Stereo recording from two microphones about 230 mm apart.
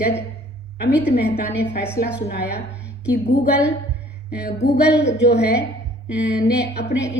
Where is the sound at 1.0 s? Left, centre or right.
Left.